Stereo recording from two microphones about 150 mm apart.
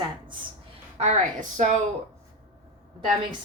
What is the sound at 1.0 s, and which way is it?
Speech, 50° right (ahead or behind).